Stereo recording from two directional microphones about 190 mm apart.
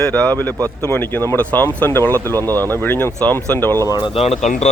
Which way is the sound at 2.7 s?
10° left (ahead or behind).